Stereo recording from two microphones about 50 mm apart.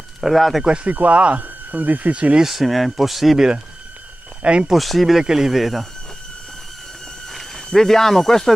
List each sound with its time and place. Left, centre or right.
0.2 s speech: centre
0.8 s speech: right
2.4 s speech: centre
4.4 s speech: right
4.6 s speech: centre
7.2 s speech: centre